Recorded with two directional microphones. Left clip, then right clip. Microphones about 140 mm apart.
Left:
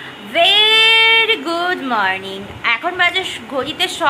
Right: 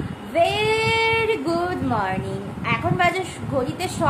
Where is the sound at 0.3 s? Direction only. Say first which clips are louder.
Left 8 dB; 5° right (ahead or behind).